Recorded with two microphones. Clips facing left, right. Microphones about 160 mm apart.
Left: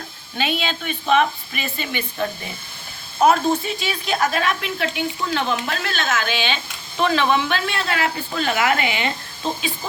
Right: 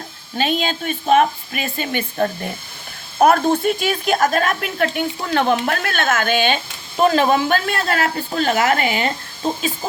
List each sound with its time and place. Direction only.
0.3 s a woman's voice: 40° right (ahead or behind)